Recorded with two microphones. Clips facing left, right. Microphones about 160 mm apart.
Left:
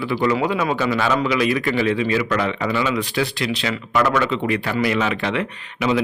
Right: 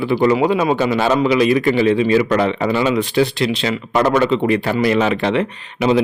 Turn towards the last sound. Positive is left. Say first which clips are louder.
# right 5 dB
turn(degrees=-30)  # may be behind; listen again after turning